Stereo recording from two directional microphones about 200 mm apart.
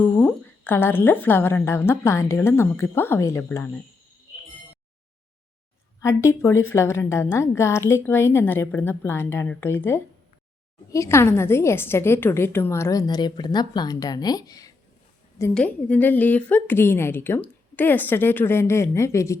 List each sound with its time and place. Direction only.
0.0 s a woman's voice: 10° left (ahead or behind)
6.0 s a woman's voice: 15° left (ahead or behind)